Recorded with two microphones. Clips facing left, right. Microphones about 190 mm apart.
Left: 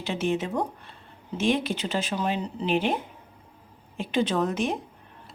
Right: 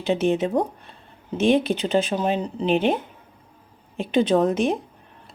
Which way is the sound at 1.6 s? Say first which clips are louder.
Right 7 dB; 20° right (ahead or behind).